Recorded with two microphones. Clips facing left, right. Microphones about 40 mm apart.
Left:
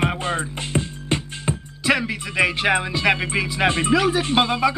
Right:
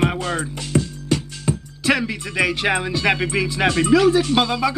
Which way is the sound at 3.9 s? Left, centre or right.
Centre.